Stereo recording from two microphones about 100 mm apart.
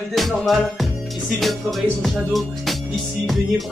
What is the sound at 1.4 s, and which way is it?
Music, centre (ahead or behind).